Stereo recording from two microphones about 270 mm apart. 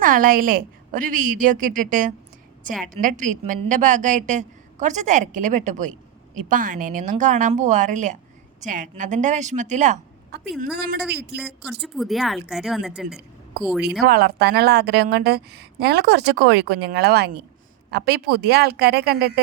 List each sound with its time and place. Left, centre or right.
0.0 s a woman's voice: right
10.8 s a woman's voice: right
11.6 s speech: centre
14.0 s a woman's voice: right